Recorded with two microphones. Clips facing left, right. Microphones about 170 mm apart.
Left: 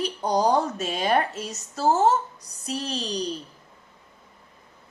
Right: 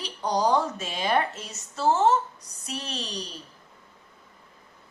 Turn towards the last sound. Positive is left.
turn(degrees=35)  # may be behind; listen again after turning